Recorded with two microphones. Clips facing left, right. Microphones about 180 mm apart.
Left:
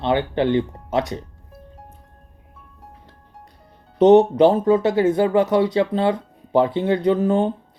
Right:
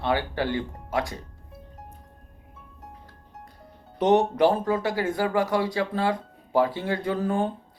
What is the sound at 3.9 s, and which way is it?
Speech, 20° left (ahead or behind).